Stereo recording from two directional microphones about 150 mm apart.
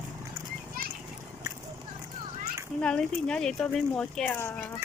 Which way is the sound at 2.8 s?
5° left (ahead or behind).